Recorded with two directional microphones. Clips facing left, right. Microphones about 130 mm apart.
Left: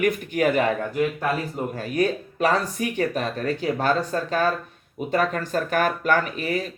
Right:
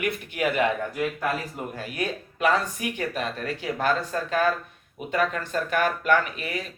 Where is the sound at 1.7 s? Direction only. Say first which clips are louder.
Left 8 dB; 35° left (ahead or behind).